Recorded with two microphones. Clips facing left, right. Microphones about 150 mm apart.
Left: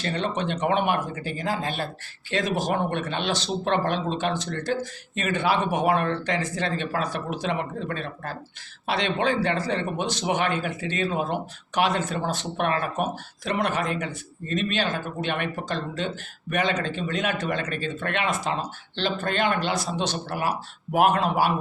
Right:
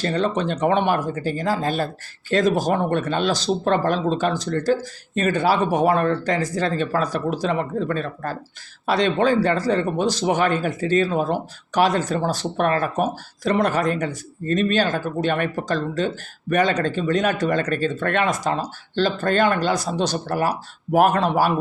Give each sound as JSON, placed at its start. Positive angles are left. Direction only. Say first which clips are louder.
{"t": 0.0, "sound": "speech", "louder": "right 5 dB", "side_deg": -35}